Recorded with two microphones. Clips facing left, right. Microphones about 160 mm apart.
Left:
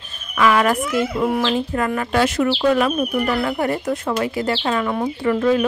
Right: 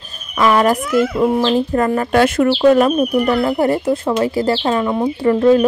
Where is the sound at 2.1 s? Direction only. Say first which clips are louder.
Right 5 dB; 55° right (ahead or behind).